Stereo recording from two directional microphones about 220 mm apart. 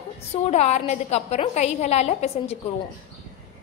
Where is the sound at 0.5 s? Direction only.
30° left (ahead or behind).